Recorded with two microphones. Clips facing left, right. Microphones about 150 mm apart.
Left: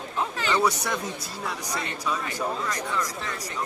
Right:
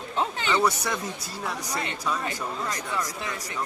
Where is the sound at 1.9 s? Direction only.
30° right (ahead or behind).